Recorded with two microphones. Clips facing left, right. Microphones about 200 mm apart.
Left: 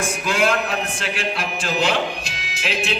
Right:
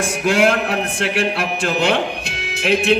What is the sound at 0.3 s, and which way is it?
A man's voice, 60° right (ahead or behind).